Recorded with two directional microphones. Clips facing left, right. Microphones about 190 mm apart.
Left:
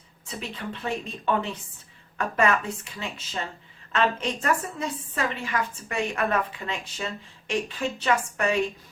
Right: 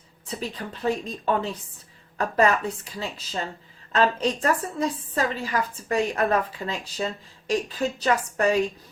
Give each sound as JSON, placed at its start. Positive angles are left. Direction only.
{"t": 0.3, "sound": "a woman's voice", "side_deg": -35}